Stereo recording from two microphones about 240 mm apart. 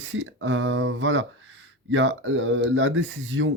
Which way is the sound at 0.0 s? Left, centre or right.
Right.